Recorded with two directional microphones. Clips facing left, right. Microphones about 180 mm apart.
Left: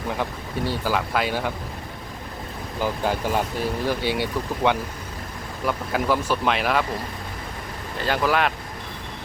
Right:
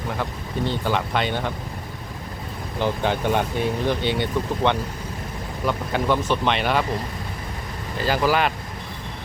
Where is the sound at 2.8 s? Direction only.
5° left (ahead or behind).